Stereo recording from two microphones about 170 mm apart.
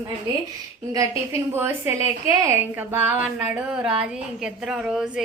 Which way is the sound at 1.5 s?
15° right (ahead or behind).